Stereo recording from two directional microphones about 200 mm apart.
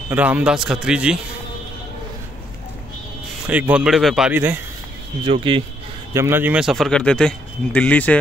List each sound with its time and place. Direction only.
0.1 s speech: 5° right (ahead or behind)
3.4 s speech: 5° right (ahead or behind)
5.2 s speech: 25° right (ahead or behind)
6.1 s speech: 10° right (ahead or behind); by 8.2 s 5° left (ahead or behind)